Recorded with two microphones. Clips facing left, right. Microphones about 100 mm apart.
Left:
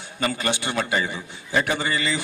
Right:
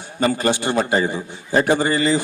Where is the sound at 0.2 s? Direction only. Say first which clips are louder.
Right 6 dB; 35° right (ahead or behind).